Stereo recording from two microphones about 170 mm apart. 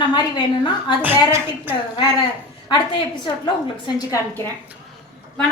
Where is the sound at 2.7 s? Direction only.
25° left (ahead or behind).